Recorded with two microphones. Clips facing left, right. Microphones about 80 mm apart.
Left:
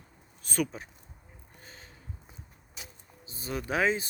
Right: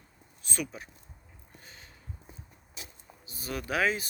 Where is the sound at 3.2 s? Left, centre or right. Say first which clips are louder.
Left 1 dB; left.